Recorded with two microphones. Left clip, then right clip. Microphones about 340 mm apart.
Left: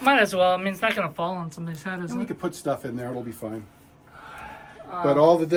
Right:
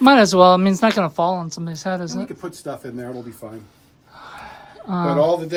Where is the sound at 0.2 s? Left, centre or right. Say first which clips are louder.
Right 8 dB; centre.